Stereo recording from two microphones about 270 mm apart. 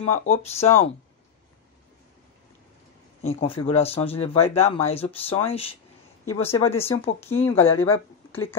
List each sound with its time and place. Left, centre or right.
0.0 s speech: left
3.2 s speech: left
7.2 s speech: centre